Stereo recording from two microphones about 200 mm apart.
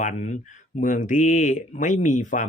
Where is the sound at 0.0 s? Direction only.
35° left (ahead or behind).